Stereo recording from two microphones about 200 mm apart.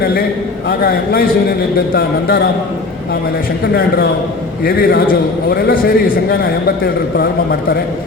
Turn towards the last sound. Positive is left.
turn(degrees=50)  # may be behind; listen again after turning